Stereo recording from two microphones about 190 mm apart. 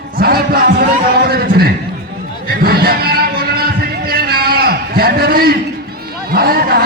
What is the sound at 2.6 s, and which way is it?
Music, 55° right (ahead or behind).